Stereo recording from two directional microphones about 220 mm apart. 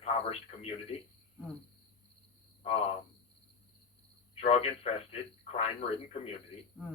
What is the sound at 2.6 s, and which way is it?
Speech, 25° left (ahead or behind).